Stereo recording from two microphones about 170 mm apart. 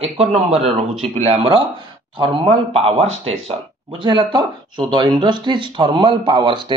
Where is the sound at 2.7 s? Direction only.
35° right (ahead or behind).